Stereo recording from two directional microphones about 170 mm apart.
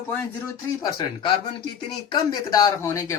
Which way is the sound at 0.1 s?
15° left (ahead or behind).